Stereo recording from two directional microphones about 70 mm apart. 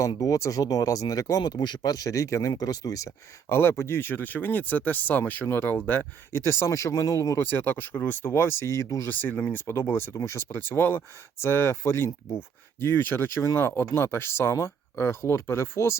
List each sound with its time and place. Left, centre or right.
0.2 s speech: left
1.4 s speech: left
2.5 s speech: left
3.5 s speech: left
6.3 s speech: left
7.3 s speech: left
9.0 s speech: left